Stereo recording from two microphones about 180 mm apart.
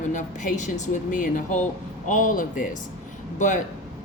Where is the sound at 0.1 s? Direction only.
45° left (ahead or behind).